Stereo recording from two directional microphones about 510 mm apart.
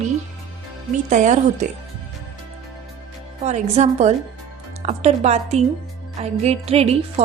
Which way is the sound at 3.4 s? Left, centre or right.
Centre.